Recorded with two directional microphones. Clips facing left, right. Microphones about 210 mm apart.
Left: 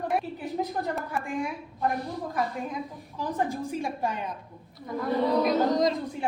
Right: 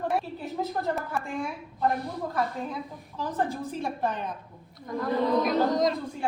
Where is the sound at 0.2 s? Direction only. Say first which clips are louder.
Left 1 dB; 15° left (ahead or behind).